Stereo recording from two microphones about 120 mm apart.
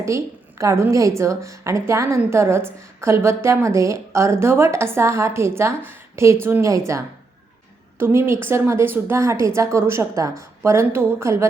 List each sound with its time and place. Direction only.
0.6 s a woman's voice: 25° right (ahead or behind)